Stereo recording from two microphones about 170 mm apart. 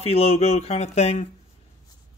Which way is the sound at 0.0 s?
35° left (ahead or behind).